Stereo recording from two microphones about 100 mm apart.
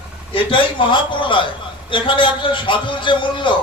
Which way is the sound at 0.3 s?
55° left (ahead or behind).